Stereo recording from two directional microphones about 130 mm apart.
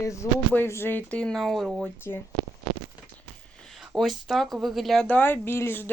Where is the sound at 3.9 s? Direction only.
Centre (ahead or behind).